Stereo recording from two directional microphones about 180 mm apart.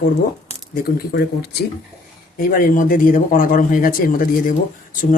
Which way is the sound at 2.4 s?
50° left (ahead or behind).